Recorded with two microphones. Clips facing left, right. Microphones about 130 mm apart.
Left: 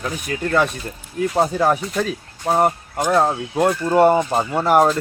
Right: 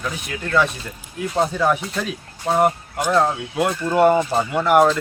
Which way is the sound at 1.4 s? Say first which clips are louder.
Left 1 dB; 35° left (ahead or behind).